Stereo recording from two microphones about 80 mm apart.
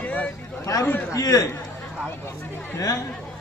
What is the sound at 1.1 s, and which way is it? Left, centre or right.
Speech, left.